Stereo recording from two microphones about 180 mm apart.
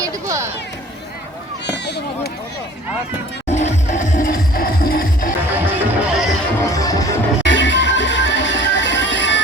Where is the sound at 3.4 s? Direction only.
40° left (ahead or behind).